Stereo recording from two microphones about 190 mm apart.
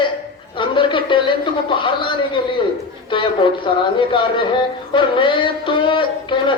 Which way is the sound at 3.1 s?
25° left (ahead or behind).